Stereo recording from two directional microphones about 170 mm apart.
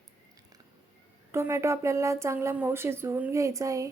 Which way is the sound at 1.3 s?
15° right (ahead or behind).